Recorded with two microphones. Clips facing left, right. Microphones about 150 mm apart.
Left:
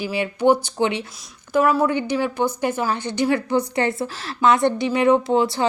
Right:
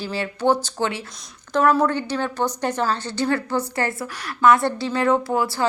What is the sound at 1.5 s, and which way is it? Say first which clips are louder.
A woman's voice: even; 5° left (ahead or behind).